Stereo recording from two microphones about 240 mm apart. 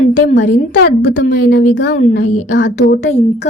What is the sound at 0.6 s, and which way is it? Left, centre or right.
A woman's voice, left.